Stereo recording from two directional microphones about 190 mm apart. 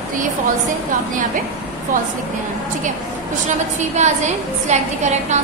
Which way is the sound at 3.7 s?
40° right (ahead or behind).